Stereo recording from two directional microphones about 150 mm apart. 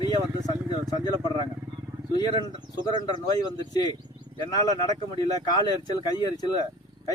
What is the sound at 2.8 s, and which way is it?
Speech, 30° left (ahead or behind).